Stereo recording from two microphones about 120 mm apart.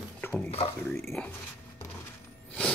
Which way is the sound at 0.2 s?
20° left (ahead or behind).